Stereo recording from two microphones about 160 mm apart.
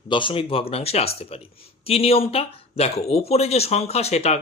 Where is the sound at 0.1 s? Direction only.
30° left (ahead or behind).